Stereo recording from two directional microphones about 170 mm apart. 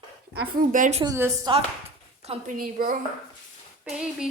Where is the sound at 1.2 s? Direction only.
15° right (ahead or behind).